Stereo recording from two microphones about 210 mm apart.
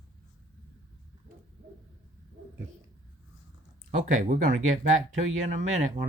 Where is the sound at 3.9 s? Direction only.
35° right (ahead or behind).